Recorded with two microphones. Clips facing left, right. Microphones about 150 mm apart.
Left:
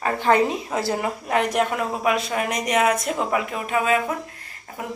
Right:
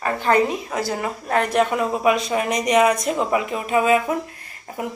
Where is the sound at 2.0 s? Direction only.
Centre (ahead or behind).